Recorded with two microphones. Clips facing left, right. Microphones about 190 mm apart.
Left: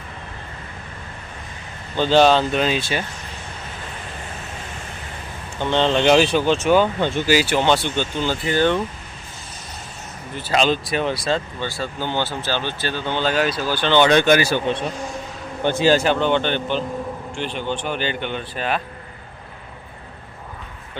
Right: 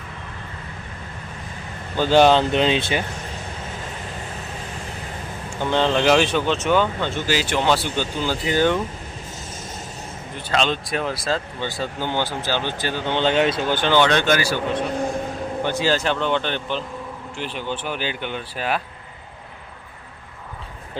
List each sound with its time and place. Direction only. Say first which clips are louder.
2.0 s speech: even; 15° right (ahead or behind)
5.5 s speech: left 1 dB; 5° right (ahead or behind)
6.1 s speech: left 2 dB; 5° left (ahead or behind); by 8.8 s 10° right (ahead or behind)
10.3 s speech: left 3 dB; 5° left (ahead or behind)
11.6 s speech: even; 15° right (ahead or behind)
14.1 s speech: left 4 dB; 15° left (ahead or behind)
14.9 s speech: right 6 dB; 55° right (ahead or behind)
15.6 s speech: left 5 dB; 20° left (ahead or behind)
16.0 s speech: left 3 dB; centre (ahead or behind)